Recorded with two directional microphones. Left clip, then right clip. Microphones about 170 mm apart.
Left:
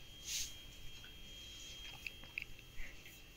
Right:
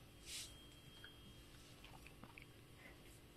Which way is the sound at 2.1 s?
15° right (ahead or behind).